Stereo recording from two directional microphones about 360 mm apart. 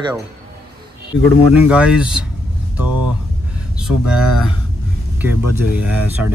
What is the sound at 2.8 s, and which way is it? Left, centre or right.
Speech, right.